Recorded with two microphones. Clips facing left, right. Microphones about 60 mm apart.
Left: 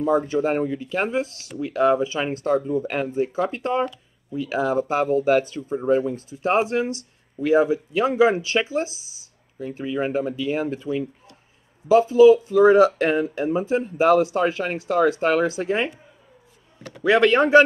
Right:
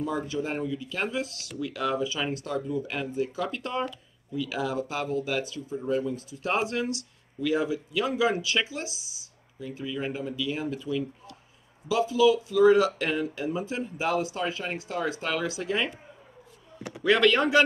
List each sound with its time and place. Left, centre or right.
0.0 s speech: left
6.4 s speech: left
17.0 s speech: left